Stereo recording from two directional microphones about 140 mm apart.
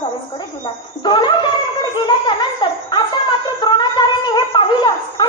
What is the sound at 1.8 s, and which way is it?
Laughter, 35° left (ahead or behind).